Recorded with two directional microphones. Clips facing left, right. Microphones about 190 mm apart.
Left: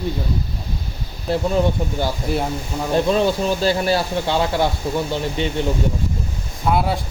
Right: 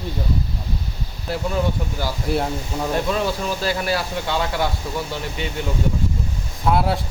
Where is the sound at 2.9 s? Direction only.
25° left (ahead or behind).